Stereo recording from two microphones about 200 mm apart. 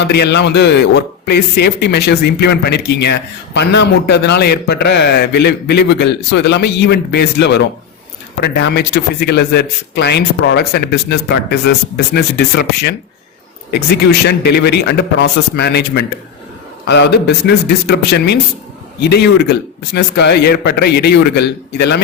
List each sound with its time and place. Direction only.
0.0 s a man's voice: 60° left (ahead or behind)
13.7 s a man's voice: 55° left (ahead or behind)